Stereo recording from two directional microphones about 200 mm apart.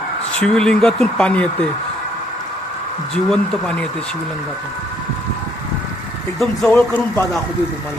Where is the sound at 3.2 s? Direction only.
Centre (ahead or behind).